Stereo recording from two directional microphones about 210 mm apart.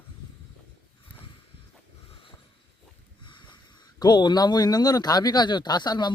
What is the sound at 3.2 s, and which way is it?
Speech, 20° left (ahead or behind).